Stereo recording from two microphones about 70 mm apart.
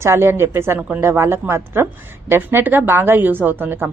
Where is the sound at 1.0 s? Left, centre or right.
Right.